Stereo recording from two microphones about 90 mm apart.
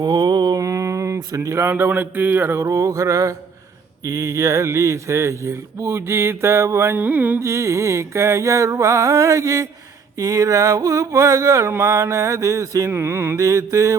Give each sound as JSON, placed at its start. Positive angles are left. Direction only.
{"t": 0.0, "sound": "mantra", "side_deg": -50}
{"t": 0.6, "sound": "speech", "side_deg": -35}
{"t": 7.4, "sound": "speech", "side_deg": -30}
{"t": 13.4, "sound": "speech", "side_deg": -35}